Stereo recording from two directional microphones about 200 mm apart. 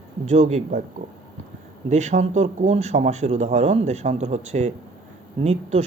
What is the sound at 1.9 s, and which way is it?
A man's voice, 35° right (ahead or behind).